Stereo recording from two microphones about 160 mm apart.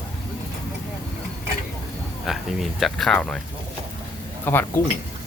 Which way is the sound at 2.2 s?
Centre (ahead or behind).